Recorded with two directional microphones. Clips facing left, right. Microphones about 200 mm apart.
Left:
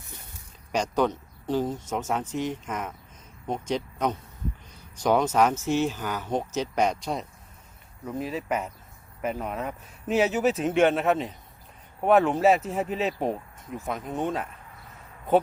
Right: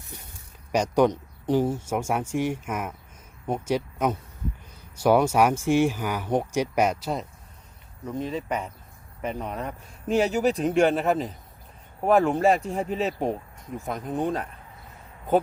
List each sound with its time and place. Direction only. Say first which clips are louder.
0.7 s speech: right 4 dB; 10° right (ahead or behind)